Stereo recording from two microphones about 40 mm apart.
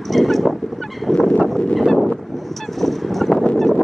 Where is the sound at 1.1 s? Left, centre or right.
Centre.